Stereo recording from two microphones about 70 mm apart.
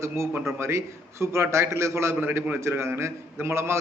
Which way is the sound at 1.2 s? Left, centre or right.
Right.